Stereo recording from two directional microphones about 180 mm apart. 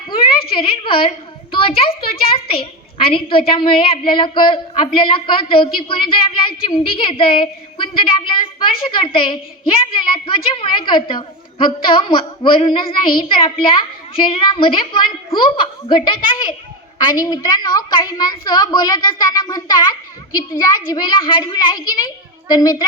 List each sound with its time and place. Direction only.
0.5 s a child's voice: 30° left (ahead or behind)